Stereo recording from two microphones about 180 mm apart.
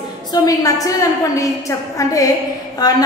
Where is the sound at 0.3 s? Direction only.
20° left (ahead or behind).